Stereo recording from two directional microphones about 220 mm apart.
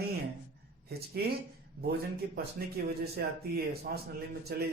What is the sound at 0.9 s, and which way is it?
Speech, 45° right (ahead or behind).